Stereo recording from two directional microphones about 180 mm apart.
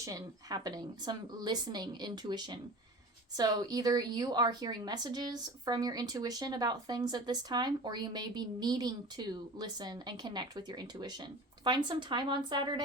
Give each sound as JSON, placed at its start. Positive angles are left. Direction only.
{"t": 0.0, "sound": "a woman's voice", "side_deg": -20}